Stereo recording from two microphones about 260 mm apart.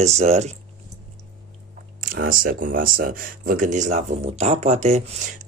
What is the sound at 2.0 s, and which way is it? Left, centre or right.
Speech, right.